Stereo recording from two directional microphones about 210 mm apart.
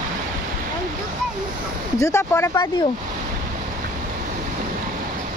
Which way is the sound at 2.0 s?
15° left (ahead or behind).